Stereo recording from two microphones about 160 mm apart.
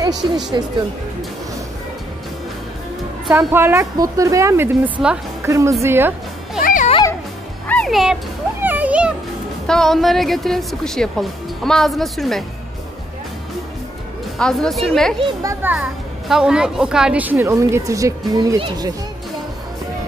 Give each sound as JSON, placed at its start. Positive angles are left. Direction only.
{"t": 0.0, "sound": "speech", "side_deg": -25}
{"t": 3.3, "sound": "a woman's voice", "side_deg": -15}
{"t": 6.6, "sound": "music", "side_deg": 55}
{"t": 7.6, "sound": "music", "side_deg": 5}
{"t": 9.7, "sound": "a woman's voice", "side_deg": 0}
{"t": 14.4, "sound": "a woman's voice", "side_deg": 0}
{"t": 15.4, "sound": "a woman's voice", "side_deg": -10}